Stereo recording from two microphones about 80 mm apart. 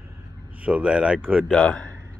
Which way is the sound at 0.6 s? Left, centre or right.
Centre.